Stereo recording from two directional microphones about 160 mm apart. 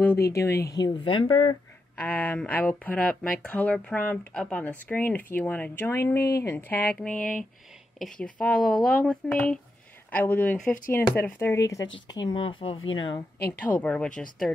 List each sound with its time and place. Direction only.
0.0 s speech: 15° left (ahead or behind); by 1.6 s 30° left (ahead or behind)
2.0 s speech: 10° left (ahead or behind); by 13.2 s 35° left (ahead or behind)
13.5 s speech: 10° left (ahead or behind)